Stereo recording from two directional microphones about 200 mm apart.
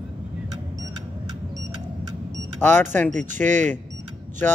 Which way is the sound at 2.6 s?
10° left (ahead or behind).